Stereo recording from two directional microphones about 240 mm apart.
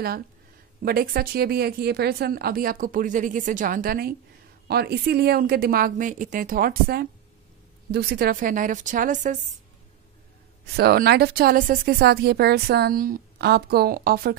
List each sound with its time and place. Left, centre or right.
0.8 s speech: right
10.8 s speech: right